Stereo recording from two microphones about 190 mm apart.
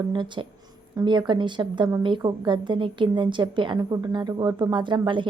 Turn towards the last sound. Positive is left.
turn(degrees=-25)  # may be behind; listen again after turning